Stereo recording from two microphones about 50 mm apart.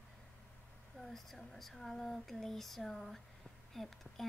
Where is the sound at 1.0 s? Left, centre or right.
Centre.